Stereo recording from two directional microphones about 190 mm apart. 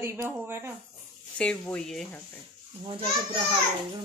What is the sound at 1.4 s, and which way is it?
Speech, 5° left (ahead or behind).